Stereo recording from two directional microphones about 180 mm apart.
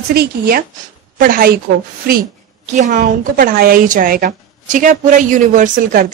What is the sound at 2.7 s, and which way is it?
A woman's voice, 45° right (ahead or behind).